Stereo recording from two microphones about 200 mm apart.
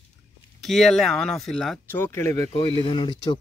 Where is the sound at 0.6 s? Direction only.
Centre (ahead or behind).